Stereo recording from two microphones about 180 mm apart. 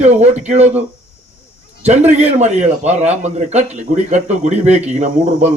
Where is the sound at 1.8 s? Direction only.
40° right (ahead or behind).